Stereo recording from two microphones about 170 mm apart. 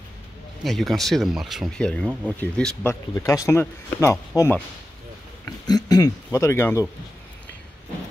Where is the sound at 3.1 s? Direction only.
20° left (ahead or behind).